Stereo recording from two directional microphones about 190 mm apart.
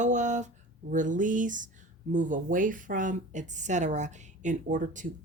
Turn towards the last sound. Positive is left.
turn(degrees=-40)  # may be behind; listen again after turning